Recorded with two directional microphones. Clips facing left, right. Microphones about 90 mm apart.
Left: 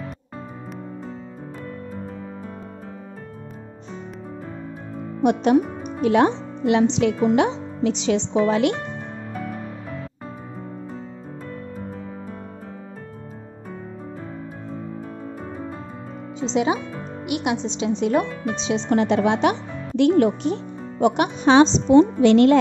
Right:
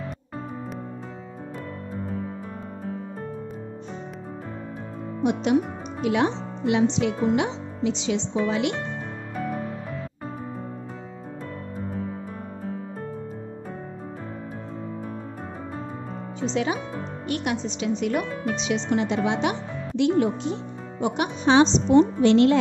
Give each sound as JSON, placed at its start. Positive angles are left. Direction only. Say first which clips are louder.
{"t": 5.2, "sound": "speech", "louder": "left 5 dB", "side_deg": 60}
{"t": 6.0, "sound": "speech", "louder": "left 5 dB", "side_deg": 50}
{"t": 16.3, "sound": "a woman's voice", "louder": "left 4 dB", "side_deg": 20}
{"t": 18.9, "sound": "speech", "louder": "left 6 dB", "side_deg": 55}